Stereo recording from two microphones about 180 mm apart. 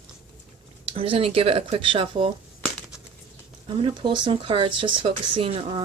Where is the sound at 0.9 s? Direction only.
30° right (ahead or behind).